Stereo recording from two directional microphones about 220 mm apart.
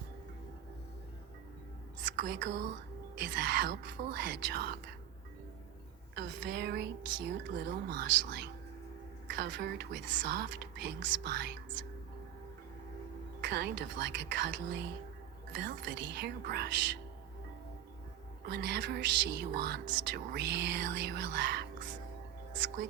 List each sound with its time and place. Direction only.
2.0 s a woman's voice: 55° right (ahead or behind)
6.1 s speech: 50° right (ahead or behind)
13.4 s speech: 50° right (ahead or behind)
18.4 s speech: 50° right (ahead or behind)